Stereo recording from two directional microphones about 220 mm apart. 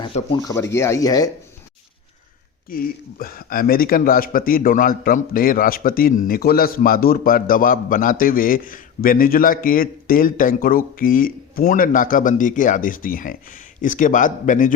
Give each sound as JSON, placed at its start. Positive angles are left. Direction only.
{"t": 0.0, "sound": "speech", "side_deg": 20}
{"t": 2.6, "sound": "speech", "side_deg": 40}